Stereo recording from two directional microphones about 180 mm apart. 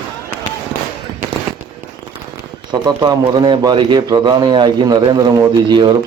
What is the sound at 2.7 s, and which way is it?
Speech, 25° right (ahead or behind).